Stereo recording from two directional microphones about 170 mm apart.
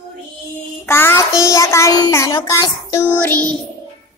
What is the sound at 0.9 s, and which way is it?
Child singing, 15° left (ahead or behind).